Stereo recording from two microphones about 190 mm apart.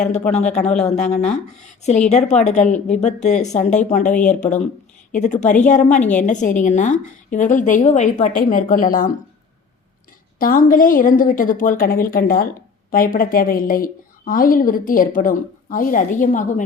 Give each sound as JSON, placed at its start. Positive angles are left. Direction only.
{"t": 0.0, "sound": "a woman's voice", "side_deg": 35}
{"t": 10.3, "sound": "a woman's voice", "side_deg": 50}